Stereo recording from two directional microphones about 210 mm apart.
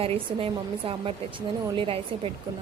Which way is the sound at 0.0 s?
25° right (ahead or behind).